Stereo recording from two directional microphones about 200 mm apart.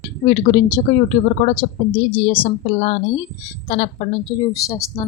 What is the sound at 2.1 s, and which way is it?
A woman's voice, 25° left (ahead or behind).